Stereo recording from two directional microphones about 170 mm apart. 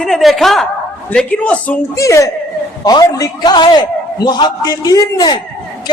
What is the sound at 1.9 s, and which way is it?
Speech, 20° left (ahead or behind).